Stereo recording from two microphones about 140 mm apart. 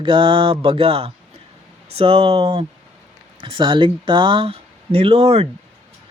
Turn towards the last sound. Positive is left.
turn(degrees=-45)  # may be behind; listen again after turning